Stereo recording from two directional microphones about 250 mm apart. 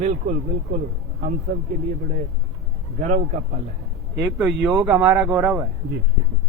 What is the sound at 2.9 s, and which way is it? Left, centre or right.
Speech, right.